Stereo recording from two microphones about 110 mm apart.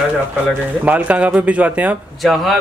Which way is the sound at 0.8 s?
15° right (ahead or behind).